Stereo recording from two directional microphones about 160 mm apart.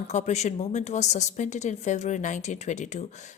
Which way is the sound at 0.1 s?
45° left (ahead or behind).